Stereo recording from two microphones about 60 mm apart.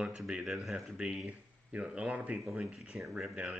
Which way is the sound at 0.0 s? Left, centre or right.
Centre.